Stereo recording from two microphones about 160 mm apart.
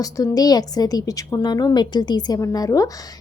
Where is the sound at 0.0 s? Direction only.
20° left (ahead or behind).